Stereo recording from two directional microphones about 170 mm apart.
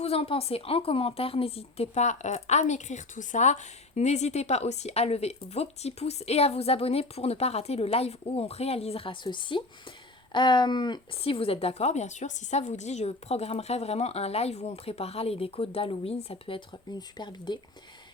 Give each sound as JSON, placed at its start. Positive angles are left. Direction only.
{"t": 0.0, "sound": "a woman's voice", "side_deg": 35}